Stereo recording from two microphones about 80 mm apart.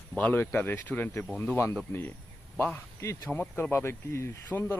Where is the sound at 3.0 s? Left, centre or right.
Left.